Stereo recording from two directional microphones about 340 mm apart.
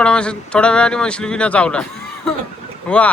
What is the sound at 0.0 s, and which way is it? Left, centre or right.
Speech, centre.